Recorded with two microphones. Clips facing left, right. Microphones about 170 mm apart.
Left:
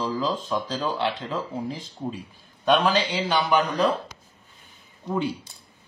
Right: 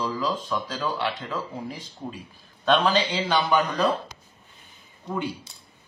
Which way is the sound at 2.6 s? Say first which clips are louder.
Left 1 dB; 5° left (ahead or behind).